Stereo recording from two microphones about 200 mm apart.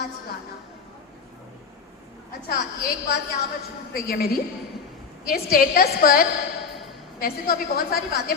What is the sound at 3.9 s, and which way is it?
A woman's voice, 50° left (ahead or behind).